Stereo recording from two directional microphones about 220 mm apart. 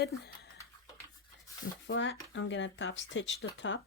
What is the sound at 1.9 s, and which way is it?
Speech, 60° left (ahead or behind).